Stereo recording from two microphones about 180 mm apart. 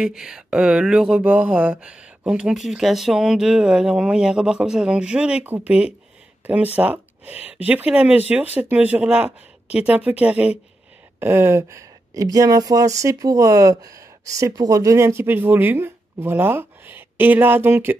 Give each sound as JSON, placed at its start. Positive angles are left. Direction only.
{"t": 0.0, "sound": "speech", "side_deg": -5}